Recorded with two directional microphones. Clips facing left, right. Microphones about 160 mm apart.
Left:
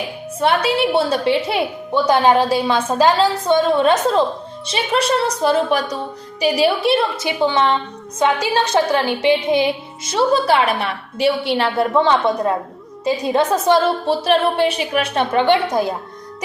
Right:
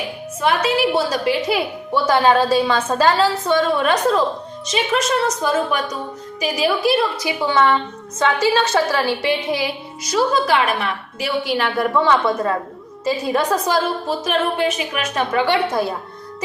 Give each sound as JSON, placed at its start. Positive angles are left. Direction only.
{"t": 0.3, "sound": "a woman's voice", "side_deg": 30}